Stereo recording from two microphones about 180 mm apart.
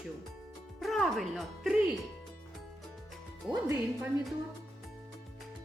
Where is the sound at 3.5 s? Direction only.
15° right (ahead or behind).